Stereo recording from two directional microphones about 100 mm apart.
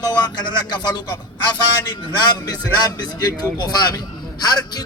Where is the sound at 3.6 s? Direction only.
40° left (ahead or behind).